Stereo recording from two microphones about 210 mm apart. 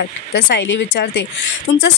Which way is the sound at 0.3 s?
60° left (ahead or behind).